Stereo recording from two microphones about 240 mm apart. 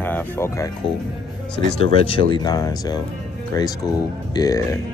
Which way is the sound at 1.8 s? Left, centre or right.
Left.